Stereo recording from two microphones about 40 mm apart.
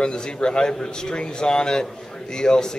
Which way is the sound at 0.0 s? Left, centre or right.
Left.